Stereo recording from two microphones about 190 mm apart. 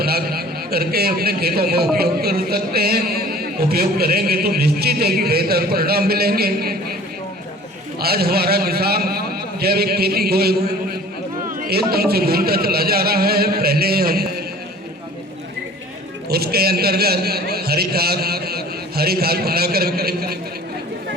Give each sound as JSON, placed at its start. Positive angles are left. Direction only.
{"t": 0.0, "sound": "a man's voice", "side_deg": -55}
{"t": 7.9, "sound": "a man's voice", "side_deg": -55}
{"t": 11.6, "sound": "speech", "side_deg": -55}
{"t": 16.3, "sound": "a man's voice", "side_deg": -55}